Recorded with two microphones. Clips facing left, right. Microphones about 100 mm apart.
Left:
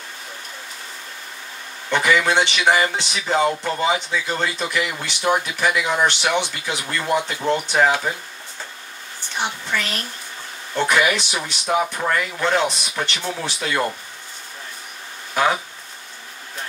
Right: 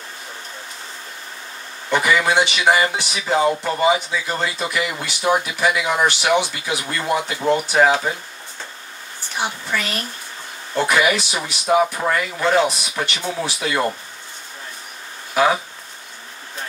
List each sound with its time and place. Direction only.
1.9 s speech: 10° right (ahead or behind)
9.4 s speech: 10° right (ahead or behind)